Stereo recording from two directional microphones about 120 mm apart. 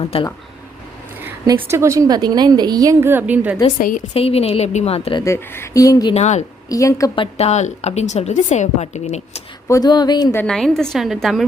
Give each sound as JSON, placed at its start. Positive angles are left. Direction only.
{"t": 0.1, "sound": "a woman's voice", "side_deg": 55}
{"t": 1.6, "sound": "a woman's voice", "side_deg": -25}
{"t": 4.1, "sound": "a woman's voice", "side_deg": 55}
{"t": 5.2, "sound": "speech", "side_deg": 25}
{"t": 6.1, "sound": "a woman's voice", "side_deg": 75}
{"t": 6.7, "sound": "speech", "side_deg": 25}
{"t": 7.3, "sound": "a woman's voice", "side_deg": 65}
{"t": 9.6, "sound": "speech", "side_deg": 25}
{"t": 9.9, "sound": "speech", "side_deg": 35}
{"t": 10.4, "sound": "a woman's voice", "side_deg": 5}